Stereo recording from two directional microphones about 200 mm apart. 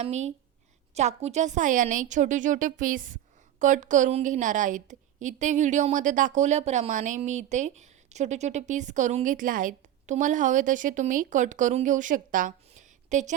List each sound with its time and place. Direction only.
0.0 s a woman's voice: 35° right (ahead or behind)